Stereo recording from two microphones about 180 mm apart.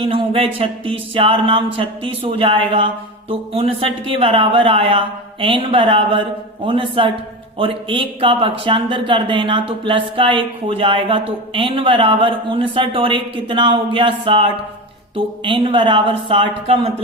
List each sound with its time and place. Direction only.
0.0 s speech: 30° right (ahead or behind)